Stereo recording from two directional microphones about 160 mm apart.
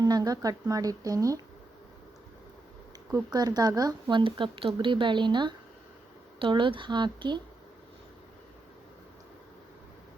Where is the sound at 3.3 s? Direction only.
25° right (ahead or behind).